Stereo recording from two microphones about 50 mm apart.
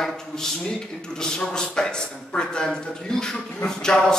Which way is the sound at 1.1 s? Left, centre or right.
Centre.